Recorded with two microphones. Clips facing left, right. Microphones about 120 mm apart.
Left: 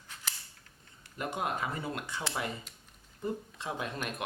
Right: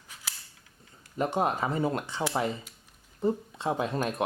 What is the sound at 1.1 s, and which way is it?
Speech, 30° right (ahead or behind).